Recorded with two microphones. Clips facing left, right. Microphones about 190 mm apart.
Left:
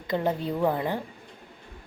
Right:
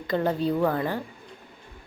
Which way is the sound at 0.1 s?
15° left (ahead or behind).